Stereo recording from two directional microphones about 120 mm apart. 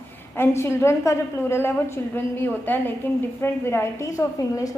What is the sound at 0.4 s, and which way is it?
A woman's voice, 20° left (ahead or behind).